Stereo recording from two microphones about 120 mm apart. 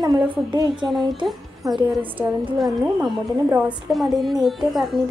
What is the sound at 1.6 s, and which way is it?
Speech, 30° right (ahead or behind).